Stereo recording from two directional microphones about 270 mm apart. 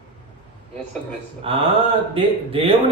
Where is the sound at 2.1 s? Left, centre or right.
Right.